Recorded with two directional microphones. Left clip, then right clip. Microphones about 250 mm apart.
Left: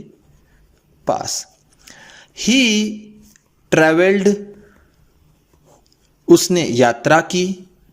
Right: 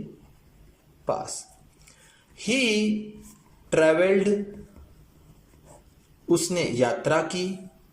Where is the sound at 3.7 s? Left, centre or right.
Left.